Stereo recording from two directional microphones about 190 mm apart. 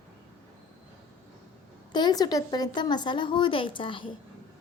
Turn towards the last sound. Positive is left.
turn(degrees=25)  # may be behind; listen again after turning